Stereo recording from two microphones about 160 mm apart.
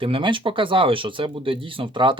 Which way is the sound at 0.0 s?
35° right (ahead or behind).